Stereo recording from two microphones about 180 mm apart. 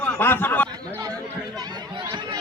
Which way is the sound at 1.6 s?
25° right (ahead or behind).